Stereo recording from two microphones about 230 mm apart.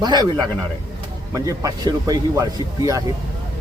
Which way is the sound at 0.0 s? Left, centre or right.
Centre.